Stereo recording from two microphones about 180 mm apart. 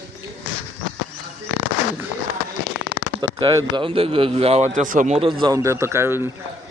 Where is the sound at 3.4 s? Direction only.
20° right (ahead or behind); by 5.2 s 45° right (ahead or behind).